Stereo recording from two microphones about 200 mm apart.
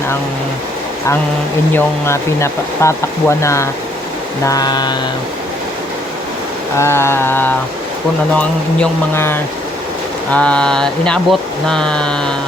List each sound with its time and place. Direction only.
1.7 s speech: 15° left (ahead or behind)
4.4 s a sound: 20° left (ahead or behind)
6.7 s speech: 15° left (ahead or behind)